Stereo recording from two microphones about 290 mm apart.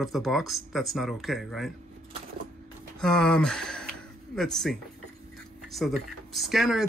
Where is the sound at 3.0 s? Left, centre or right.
Centre.